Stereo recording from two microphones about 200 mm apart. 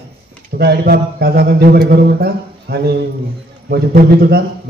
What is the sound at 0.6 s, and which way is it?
A man's voice, 55° right (ahead or behind).